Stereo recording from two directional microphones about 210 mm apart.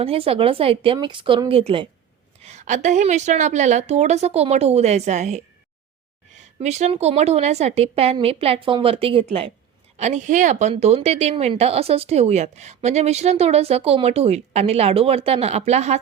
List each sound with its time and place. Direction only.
0.0 s a woman's voice: 25° right (ahead or behind)
6.6 s a woman's voice: 35° right (ahead or behind)